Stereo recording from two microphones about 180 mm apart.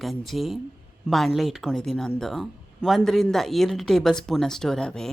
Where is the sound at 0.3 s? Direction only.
Centre (ahead or behind).